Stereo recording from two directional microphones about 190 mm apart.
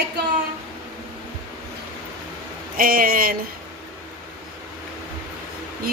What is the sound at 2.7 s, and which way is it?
Speech, 50° right (ahead or behind).